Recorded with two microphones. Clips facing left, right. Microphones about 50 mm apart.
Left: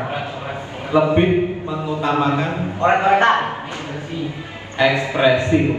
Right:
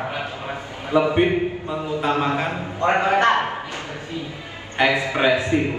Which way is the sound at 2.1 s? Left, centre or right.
Left.